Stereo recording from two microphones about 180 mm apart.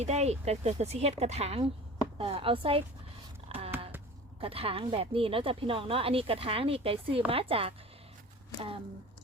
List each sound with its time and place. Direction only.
0.0 s speech: 35° right (ahead or behind)
3.5 s a sound: 35° right (ahead or behind)
4.4 s speech: 30° right (ahead or behind)